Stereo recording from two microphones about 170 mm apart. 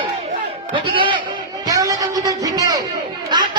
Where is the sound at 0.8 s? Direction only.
30° right (ahead or behind).